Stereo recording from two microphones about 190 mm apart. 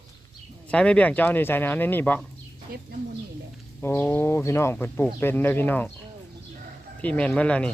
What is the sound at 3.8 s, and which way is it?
Speech, 15° left (ahead or behind).